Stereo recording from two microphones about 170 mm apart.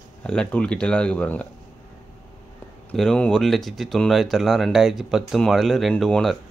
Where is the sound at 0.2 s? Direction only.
5° left (ahead or behind).